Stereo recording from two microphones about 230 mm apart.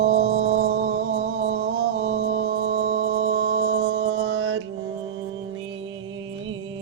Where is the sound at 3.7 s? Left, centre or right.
Right.